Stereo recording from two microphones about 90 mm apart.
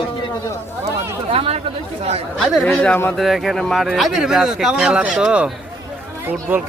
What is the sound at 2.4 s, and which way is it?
Speech, centre (ahead or behind).